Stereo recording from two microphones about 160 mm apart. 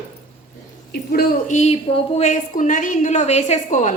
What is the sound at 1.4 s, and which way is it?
A woman's voice, 45° left (ahead or behind).